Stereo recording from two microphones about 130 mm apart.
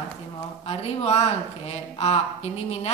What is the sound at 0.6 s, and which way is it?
A woman's voice, 50° left (ahead or behind).